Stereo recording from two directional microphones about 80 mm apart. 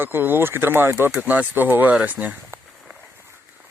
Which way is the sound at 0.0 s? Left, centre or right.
Right.